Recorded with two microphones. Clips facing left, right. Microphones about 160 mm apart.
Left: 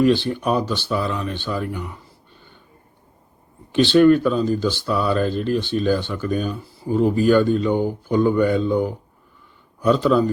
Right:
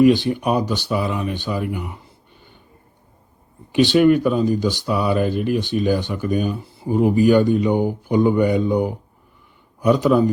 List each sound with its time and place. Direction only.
0.0 s speech: 15° right (ahead or behind)
3.7 s speech: 15° right (ahead or behind)